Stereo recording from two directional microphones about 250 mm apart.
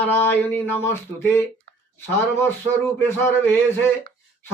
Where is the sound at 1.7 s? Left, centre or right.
Right.